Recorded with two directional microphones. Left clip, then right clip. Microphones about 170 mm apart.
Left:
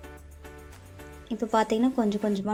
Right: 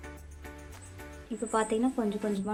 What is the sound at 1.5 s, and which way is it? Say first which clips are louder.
Speech: left 4 dB; 25° left (ahead or behind).